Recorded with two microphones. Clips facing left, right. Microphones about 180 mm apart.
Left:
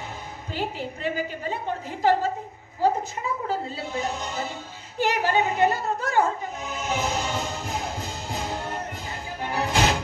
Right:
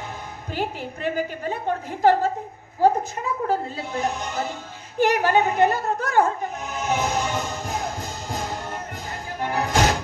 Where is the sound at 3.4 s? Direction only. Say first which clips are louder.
Right 4 dB; 55° right (ahead or behind).